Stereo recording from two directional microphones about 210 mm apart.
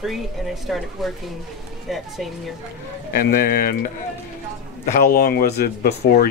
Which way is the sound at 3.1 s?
45° left (ahead or behind).